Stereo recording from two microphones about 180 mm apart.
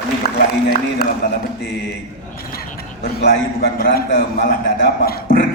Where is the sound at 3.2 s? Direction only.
60° left (ahead or behind).